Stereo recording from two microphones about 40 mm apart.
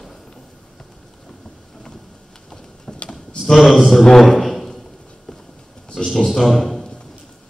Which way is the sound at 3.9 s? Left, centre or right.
Centre.